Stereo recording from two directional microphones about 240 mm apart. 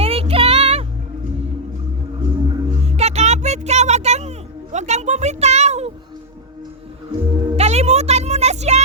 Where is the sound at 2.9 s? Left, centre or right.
Right.